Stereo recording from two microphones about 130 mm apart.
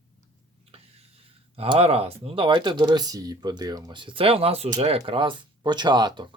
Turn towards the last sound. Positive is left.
turn(degrees=-35)  # may be behind; listen again after turning